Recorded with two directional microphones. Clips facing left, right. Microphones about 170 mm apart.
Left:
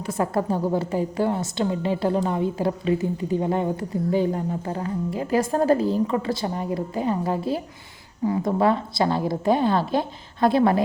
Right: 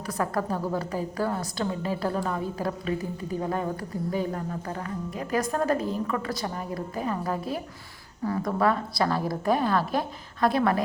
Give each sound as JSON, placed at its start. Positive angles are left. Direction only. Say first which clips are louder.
{"t": 0.1, "sound": "a woman's voice", "louder": "left 4 dB", "side_deg": 25}